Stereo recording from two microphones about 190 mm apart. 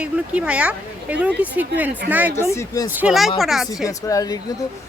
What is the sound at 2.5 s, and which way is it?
Speech, 15° left (ahead or behind).